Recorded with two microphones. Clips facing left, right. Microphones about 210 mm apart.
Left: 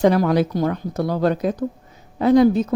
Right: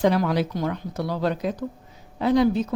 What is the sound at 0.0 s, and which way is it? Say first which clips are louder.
Speech: left 5 dB; 45° left (ahead or behind).